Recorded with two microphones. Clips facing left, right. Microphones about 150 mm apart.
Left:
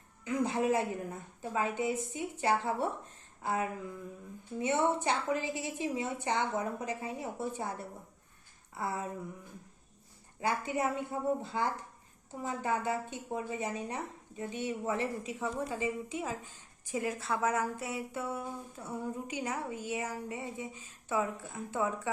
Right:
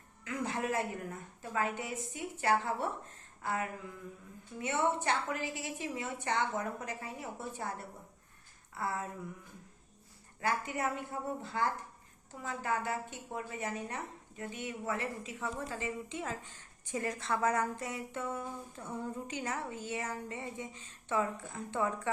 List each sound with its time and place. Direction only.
0.3 s a woman's voice: 20° left (ahead or behind)
8.7 s speech: 20° left (ahead or behind)
10.4 s a woman's voice: 20° left (ahead or behind)